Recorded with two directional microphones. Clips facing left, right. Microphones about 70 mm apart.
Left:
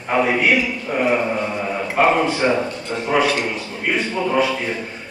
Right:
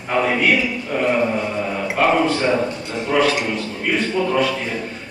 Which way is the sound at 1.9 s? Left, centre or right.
Centre.